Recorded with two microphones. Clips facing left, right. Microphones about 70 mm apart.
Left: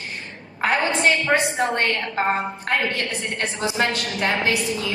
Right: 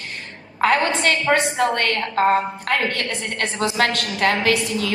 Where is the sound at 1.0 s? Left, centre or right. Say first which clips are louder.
Even; right.